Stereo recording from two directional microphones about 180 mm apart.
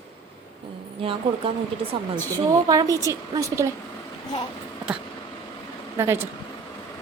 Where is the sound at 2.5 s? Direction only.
20° right (ahead or behind).